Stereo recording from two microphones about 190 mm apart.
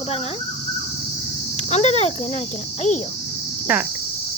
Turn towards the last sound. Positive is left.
turn(degrees=-10)  # may be behind; listen again after turning